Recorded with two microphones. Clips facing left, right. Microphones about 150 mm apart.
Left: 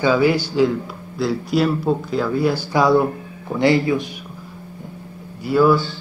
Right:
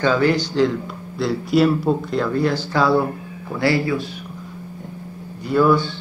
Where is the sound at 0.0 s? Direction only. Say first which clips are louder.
Left 1 dB; 10° left (ahead or behind).